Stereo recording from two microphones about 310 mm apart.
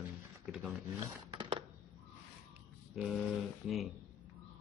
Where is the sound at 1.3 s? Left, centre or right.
Centre.